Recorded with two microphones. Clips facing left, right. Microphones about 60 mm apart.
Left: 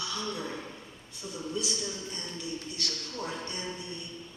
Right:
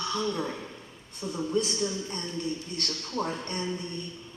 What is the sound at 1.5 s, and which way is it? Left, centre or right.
A man's voice, right.